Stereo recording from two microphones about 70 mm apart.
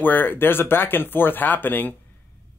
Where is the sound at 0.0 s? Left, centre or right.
Left.